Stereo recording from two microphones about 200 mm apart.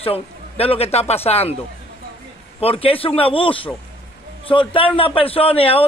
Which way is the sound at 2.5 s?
30° left (ahead or behind).